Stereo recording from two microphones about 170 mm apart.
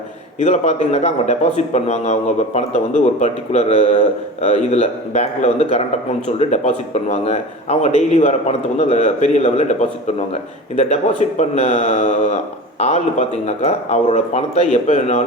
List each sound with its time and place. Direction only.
0.3 s speech: 40° left (ahead or behind)
10.8 s speech: 40° left (ahead or behind)